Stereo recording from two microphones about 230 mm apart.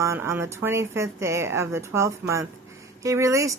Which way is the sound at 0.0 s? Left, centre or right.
Centre.